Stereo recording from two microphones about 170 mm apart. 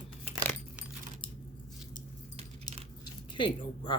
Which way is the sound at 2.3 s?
35° right (ahead or behind).